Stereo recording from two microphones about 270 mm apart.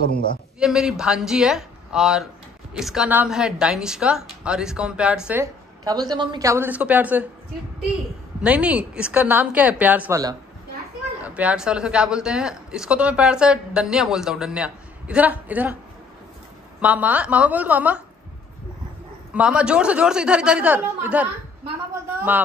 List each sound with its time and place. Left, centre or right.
0.0 s a man's voice: left
0.6 s speech: centre
8.4 s speech: centre
16.8 s speech: centre
19.3 s speech: centre